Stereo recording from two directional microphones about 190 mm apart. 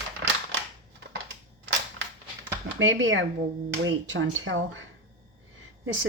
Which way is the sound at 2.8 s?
90° right.